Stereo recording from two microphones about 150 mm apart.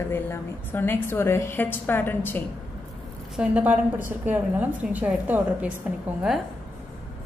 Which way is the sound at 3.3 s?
10° right (ahead or behind).